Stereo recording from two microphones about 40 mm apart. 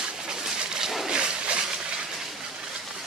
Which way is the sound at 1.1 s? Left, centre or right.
Right.